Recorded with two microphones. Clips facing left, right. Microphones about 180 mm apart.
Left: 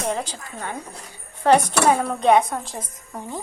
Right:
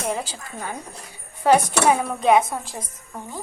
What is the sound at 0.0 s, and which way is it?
Speech, 5° right (ahead or behind).